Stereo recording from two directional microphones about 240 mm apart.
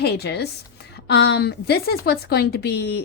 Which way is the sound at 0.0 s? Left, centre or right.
Left.